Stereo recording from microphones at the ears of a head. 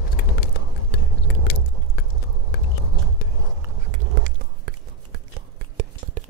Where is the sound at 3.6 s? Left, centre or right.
Right.